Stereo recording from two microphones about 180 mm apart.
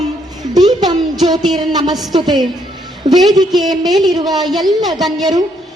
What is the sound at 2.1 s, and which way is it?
Music, 25° right (ahead or behind).